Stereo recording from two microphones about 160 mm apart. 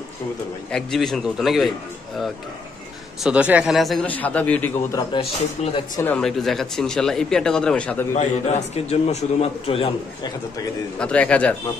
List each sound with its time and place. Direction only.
0.7 s speech: 5° left (ahead or behind)
3.2 s speech: 5° right (ahead or behind); by 4.6 s 10° left (ahead or behind)
5.2 s a man's voice: 35° left (ahead or behind)
6.1 s speech: centre (ahead or behind)
8.1 s a man's voice: 45° left (ahead or behind)
11.0 s a man's voice: 5° left (ahead or behind)